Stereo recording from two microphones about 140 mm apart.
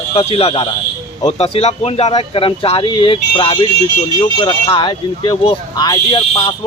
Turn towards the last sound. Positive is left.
turn(degrees=30)  # may be behind; listen again after turning